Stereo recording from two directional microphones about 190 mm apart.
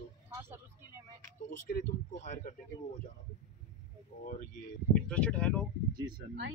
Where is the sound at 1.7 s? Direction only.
40° left (ahead or behind).